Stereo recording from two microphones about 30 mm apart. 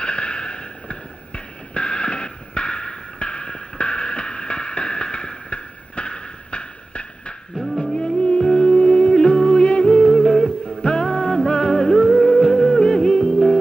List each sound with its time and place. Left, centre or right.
0.0 s a sound: left
7.8 s music: left
8.6 s music: left
10.1 s music: centre
10.4 s music: left
11.1 s music: centre
13.1 s music: left